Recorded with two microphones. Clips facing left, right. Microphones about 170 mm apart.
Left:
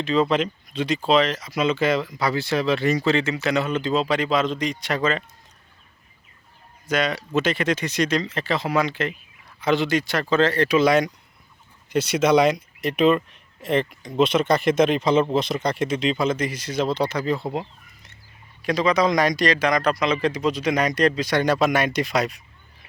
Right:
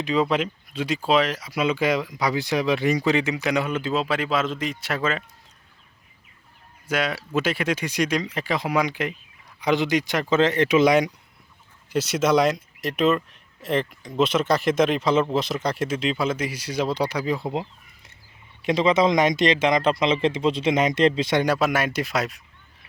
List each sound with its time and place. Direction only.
0.0 s speech: 10° right (ahead or behind)
6.8 s speech: 10° right (ahead or behind)
11.9 s speech: centre (ahead or behind)
18.6 s speech: 25° right (ahead or behind)
21.4 s speech: 5° right (ahead or behind)